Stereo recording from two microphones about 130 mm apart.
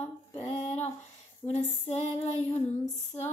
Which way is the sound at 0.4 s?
55° left (ahead or behind).